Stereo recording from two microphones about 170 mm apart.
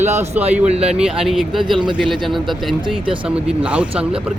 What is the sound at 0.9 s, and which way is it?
A man's voice, 5° right (ahead or behind).